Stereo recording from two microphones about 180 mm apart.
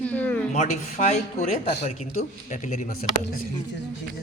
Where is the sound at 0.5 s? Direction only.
40° left (ahead or behind).